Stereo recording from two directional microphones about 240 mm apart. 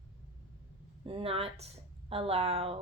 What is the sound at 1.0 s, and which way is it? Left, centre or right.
A woman's voice, right.